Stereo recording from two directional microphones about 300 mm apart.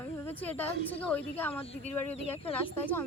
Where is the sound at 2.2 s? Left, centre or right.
Centre.